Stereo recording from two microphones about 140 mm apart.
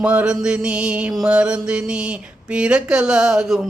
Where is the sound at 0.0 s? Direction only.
10° right (ahead or behind).